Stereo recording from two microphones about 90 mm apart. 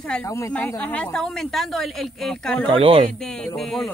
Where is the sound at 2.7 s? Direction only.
90° right.